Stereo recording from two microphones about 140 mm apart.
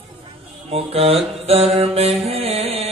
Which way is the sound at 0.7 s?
45° right (ahead or behind).